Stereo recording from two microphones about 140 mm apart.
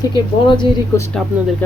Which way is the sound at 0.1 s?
35° left (ahead or behind).